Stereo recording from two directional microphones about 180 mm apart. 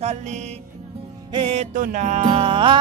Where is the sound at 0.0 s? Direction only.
40° right (ahead or behind).